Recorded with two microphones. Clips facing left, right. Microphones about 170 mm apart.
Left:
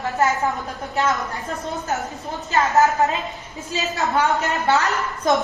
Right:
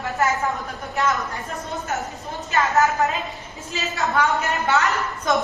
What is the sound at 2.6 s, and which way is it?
Child singing, 20° left (ahead or behind).